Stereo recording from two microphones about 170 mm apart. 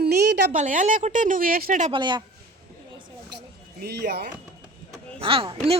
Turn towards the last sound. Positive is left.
turn(degrees=-30)  # may be behind; listen again after turning